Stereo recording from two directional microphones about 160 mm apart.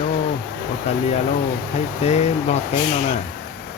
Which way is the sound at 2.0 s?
45° left (ahead or behind).